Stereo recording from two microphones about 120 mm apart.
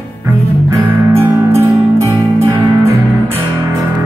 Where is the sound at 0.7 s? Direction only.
25° right (ahead or behind).